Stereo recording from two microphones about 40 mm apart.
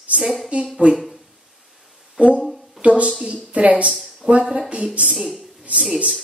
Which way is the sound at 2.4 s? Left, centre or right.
Centre.